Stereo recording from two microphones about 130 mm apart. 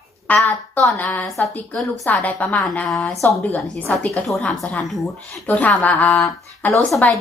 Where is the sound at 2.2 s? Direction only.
15° left (ahead or behind).